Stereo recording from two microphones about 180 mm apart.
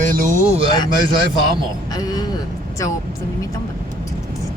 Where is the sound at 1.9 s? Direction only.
20° left (ahead or behind).